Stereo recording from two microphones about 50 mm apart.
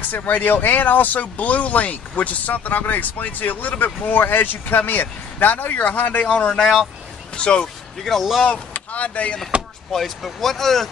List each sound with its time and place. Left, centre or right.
0.1 s speech: left
6.5 s speech: centre
7.3 s speech: left
7.6 s speech: centre
8.7 s vehicle: left
9.9 s speech: centre